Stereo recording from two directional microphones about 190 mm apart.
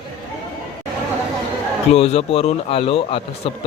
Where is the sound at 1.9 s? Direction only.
30° left (ahead or behind).